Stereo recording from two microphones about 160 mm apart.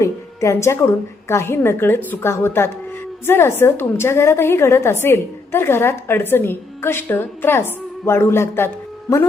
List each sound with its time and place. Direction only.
0.0 s a woman's voice: 20° left (ahead or behind)